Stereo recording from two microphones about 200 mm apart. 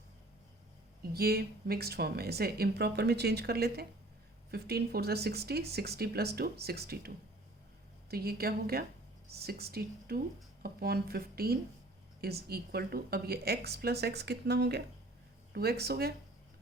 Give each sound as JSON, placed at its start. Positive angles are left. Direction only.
{"t": 1.1, "sound": "speech", "side_deg": -50}
{"t": 8.1, "sound": "speech", "side_deg": -50}